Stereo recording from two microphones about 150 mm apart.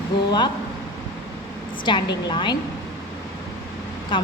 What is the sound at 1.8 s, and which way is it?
Speech, 30° left (ahead or behind).